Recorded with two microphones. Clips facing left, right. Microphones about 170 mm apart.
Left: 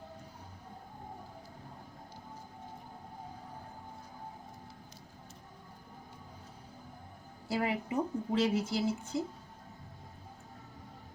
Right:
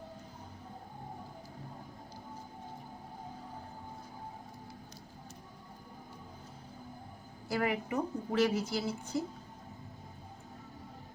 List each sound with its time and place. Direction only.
7.4 s a woman's voice: 25° left (ahead or behind)